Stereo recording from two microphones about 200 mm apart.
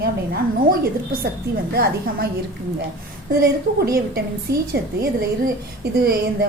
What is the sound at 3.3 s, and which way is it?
A woman's voice, 50° right (ahead or behind).